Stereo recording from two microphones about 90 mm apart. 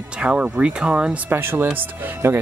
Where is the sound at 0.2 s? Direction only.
15° right (ahead or behind).